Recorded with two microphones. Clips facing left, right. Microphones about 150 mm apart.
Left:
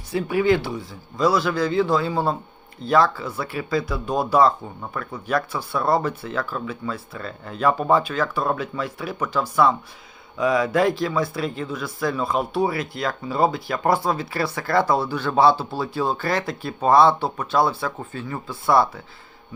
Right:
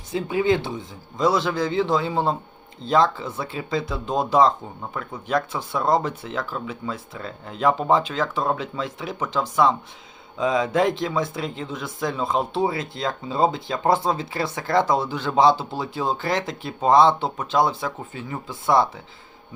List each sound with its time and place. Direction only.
0.1 s speech: 20° right (ahead or behind)